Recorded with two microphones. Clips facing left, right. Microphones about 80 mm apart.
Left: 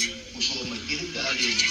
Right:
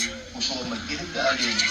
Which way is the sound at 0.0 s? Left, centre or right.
Right.